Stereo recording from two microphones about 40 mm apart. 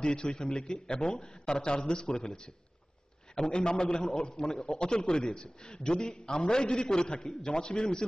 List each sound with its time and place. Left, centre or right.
0.0 s a man's voice: left
3.6 s a man's voice: centre
4.4 s a man's voice: centre
4.6 s a man's voice: left